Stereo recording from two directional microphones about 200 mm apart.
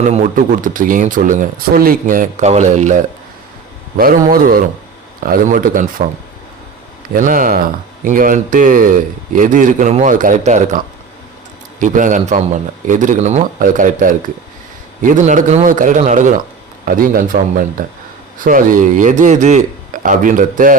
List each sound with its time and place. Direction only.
0.1 s speech: 40° right (ahead or behind)
4.3 s a man's voice: 45° right (ahead or behind)
7.1 s a man's voice: 40° right (ahead or behind)